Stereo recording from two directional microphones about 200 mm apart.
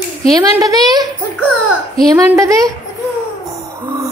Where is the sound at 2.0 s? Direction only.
15° right (ahead or behind).